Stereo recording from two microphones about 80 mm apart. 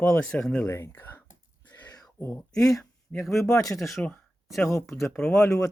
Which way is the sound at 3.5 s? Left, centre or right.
Left.